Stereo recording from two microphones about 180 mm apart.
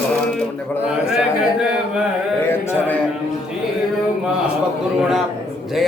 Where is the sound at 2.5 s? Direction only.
10° left (ahead or behind).